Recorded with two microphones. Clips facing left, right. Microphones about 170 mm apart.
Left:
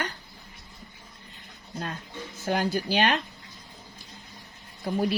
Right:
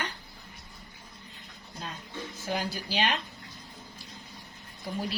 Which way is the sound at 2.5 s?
50° left (ahead or behind).